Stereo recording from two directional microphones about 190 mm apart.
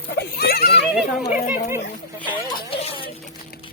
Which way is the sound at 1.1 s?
Centre (ahead or behind).